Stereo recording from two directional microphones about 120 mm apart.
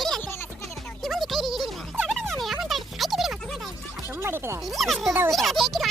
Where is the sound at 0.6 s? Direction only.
Centre (ahead or behind).